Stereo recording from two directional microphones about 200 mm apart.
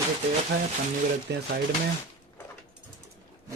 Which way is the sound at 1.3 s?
55° right (ahead or behind).